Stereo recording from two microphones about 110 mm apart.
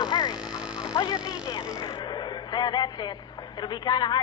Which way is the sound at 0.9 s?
35° left (ahead or behind).